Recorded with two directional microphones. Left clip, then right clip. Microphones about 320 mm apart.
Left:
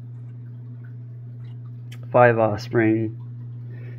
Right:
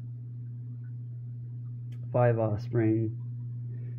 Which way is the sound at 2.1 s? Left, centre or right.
Left.